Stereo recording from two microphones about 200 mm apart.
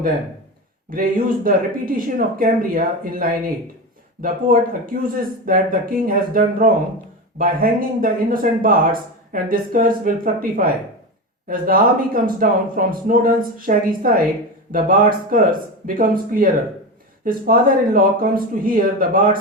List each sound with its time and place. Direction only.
0.9 s speech: 45° right (ahead or behind)